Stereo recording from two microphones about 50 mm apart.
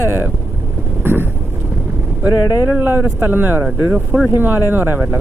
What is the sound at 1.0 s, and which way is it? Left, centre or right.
Vehicle, right.